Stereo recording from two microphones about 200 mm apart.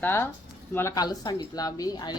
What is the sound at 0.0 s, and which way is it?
Speech, 10° left (ahead or behind).